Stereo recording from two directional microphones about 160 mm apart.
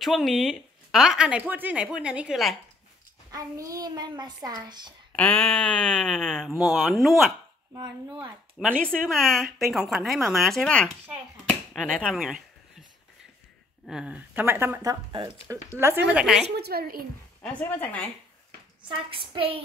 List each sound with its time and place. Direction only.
0.0 s speech: centre (ahead or behind)
3.3 s a child's voice: 20° right (ahead or behind)
5.1 s speech: 5° left (ahead or behind)
7.7 s a child's voice: 25° right (ahead or behind)
8.5 s speech: 5° left (ahead or behind)
13.8 s speech: 5° right (ahead or behind); by 15.3 s 25° right (ahead or behind)
16.1 s speech: 5° right (ahead or behind)
16.4 s a woman's voice: 90° right; by 17.0 s 70° right (ahead or behind)
17.4 s speech: 10° left (ahead or behind)
18.8 s a woman's voice: 30° right (ahead or behind)